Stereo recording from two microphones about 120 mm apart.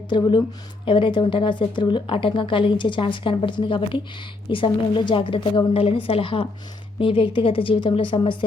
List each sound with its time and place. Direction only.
0.1 s a woman's voice: 40° left (ahead or behind)